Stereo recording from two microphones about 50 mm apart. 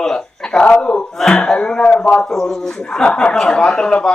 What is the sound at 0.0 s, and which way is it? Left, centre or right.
A man's voice, centre.